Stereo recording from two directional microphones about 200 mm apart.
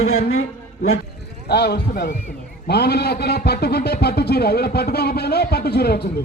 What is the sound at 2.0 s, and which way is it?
A man's voice, 40° left (ahead or behind).